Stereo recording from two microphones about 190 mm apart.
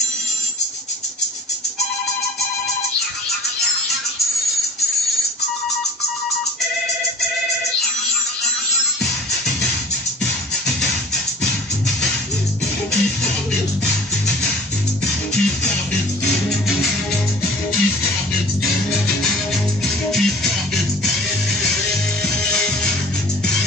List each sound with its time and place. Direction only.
20.1 s music: centre (ahead or behind)